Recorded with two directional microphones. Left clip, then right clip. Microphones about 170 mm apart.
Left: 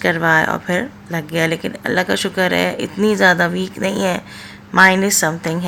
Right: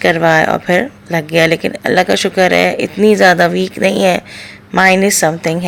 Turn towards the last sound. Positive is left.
turn(degrees=-20)  # may be behind; listen again after turning